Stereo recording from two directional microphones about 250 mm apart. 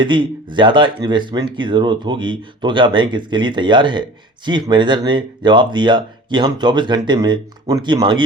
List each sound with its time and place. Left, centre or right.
0.0 s speech: centre